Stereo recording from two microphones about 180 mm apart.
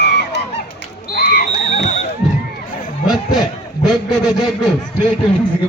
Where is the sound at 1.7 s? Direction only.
40° left (ahead or behind).